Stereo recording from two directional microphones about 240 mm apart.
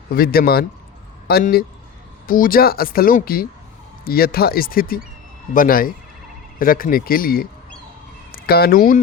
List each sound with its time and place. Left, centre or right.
0.1 s speech: left